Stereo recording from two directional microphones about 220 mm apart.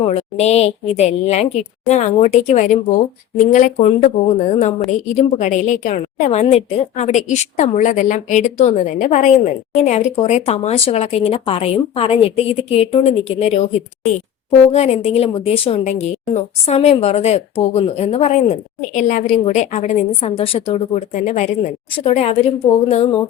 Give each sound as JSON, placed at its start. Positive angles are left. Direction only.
{"t": 0.0, "sound": "a woman's voice", "side_deg": 30}
{"t": 5.1, "sound": "a woman's voice", "side_deg": 35}